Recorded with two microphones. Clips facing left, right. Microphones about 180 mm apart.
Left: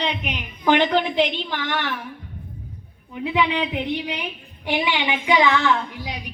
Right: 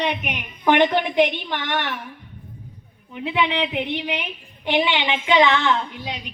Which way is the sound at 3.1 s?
20° right (ahead or behind).